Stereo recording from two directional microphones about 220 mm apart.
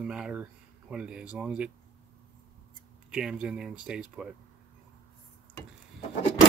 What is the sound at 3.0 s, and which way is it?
Speech, 5° right (ahead or behind).